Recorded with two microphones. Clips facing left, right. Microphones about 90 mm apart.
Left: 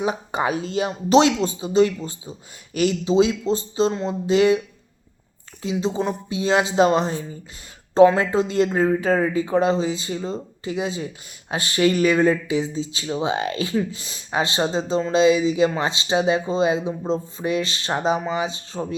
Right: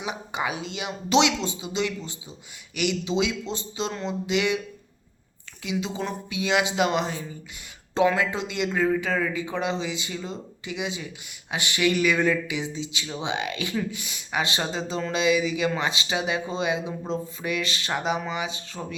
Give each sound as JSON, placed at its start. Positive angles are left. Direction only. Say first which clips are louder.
{"t": 0.0, "sound": "speech", "louder": "left 7 dB", "side_deg": 40}
{"t": 5.6, "sound": "speech", "louder": "left 6 dB", "side_deg": 35}